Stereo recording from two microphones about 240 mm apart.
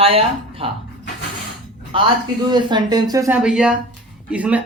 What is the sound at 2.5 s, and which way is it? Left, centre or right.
Speech, centre.